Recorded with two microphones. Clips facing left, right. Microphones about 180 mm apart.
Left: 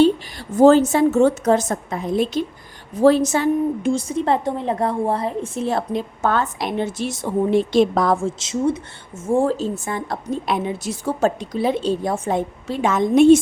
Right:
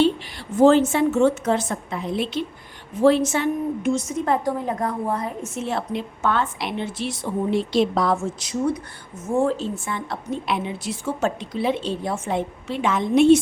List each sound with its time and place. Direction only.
0.0 s a woman's voice: 40° left (ahead or behind)
8.1 s a woman's voice: 30° left (ahead or behind); by 13.4 s 45° left (ahead or behind)